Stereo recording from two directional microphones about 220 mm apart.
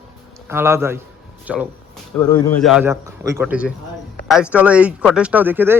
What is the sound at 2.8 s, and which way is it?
Speech, 15° right (ahead or behind).